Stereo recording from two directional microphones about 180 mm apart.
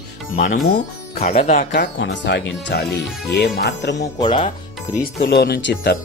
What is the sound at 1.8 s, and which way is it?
Speech, 75° left (ahead or behind).